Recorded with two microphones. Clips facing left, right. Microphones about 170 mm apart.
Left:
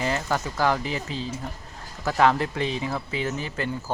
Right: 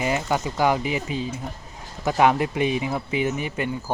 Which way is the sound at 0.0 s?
15° right (ahead or behind).